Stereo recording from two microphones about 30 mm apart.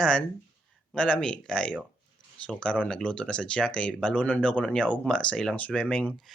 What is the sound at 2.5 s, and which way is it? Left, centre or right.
Speech, left.